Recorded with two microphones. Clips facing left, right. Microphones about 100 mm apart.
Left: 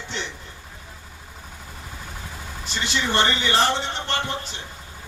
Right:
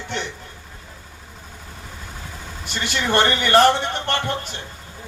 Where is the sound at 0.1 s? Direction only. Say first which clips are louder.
Right 4 dB; 55° right (ahead or behind).